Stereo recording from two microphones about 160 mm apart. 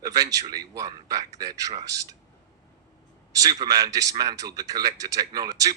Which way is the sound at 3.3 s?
20° right (ahead or behind).